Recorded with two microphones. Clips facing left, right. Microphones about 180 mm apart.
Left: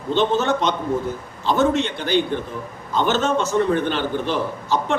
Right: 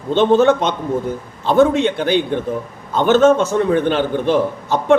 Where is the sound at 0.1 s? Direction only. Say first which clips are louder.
Right 7 dB; 55° right (ahead or behind).